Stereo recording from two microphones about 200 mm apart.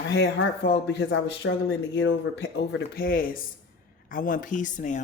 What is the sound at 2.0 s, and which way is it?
A woman's voice, 65° left (ahead or behind).